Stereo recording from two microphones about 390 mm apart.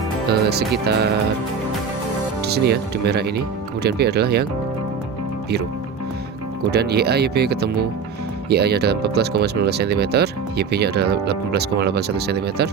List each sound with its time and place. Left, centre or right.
0.3 s speech: right
2.4 s speech: right
6.7 s speech: right